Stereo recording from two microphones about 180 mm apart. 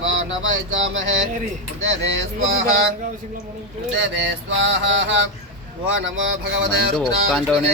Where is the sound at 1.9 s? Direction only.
85° right.